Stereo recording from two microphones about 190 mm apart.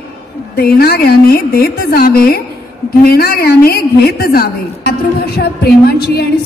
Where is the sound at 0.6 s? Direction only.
55° left (ahead or behind).